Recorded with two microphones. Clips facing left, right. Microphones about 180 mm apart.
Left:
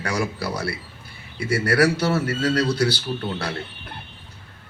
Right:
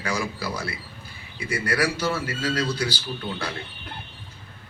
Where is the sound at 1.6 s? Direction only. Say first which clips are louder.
Left 5 dB; 70° left (ahead or behind).